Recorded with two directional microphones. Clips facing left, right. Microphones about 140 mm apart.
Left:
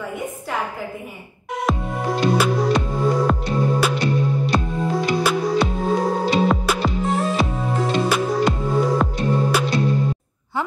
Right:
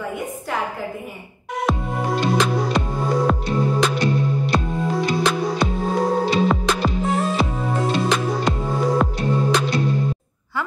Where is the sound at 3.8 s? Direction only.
5° left (ahead or behind).